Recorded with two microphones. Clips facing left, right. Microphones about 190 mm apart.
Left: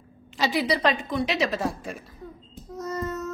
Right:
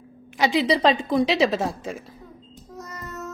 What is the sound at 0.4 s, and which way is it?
A woman's voice, 20° right (ahead or behind).